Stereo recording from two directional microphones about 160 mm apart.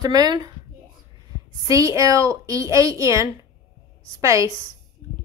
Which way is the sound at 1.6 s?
20° right (ahead or behind).